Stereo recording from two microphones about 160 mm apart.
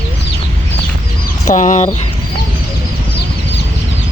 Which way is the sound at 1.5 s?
50° left (ahead or behind).